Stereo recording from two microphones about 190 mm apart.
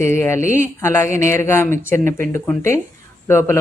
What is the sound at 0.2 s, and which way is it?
Speech, 15° left (ahead or behind).